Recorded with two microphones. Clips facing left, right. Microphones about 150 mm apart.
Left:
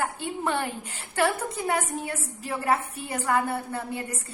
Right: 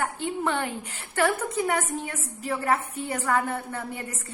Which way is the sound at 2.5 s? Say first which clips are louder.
Even; 10° left (ahead or behind).